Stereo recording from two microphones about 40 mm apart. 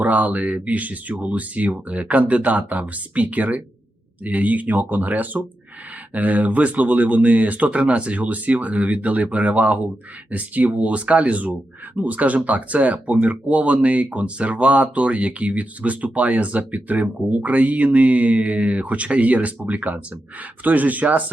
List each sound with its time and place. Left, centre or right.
0.0 s speech: right